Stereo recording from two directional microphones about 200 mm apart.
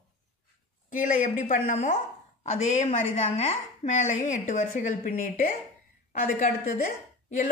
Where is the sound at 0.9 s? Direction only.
40° left (ahead or behind).